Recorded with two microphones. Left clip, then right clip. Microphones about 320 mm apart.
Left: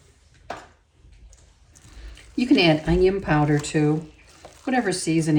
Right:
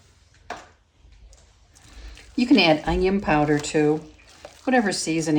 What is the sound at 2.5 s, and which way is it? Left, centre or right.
Speech, centre.